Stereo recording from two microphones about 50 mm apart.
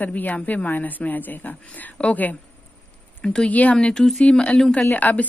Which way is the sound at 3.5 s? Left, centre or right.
Left.